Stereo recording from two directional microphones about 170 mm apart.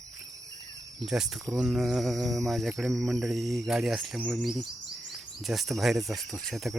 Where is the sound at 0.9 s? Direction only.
Centre (ahead or behind).